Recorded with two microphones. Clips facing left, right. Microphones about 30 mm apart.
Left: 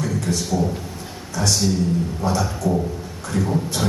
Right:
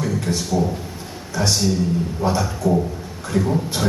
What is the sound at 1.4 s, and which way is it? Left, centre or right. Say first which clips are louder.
A man's voice: right 1 dB; centre.